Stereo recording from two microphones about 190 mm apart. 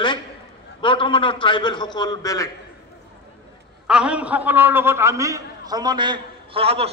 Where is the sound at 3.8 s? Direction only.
5° right (ahead or behind).